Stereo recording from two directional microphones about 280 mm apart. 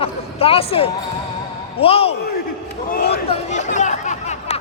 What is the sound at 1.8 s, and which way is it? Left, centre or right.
Speech, left.